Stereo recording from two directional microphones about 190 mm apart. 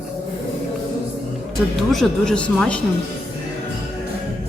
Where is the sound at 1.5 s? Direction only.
Centre (ahead or behind).